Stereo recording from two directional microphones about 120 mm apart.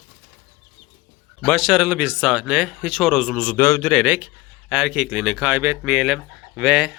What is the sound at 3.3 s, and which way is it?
Speech, 15° left (ahead or behind).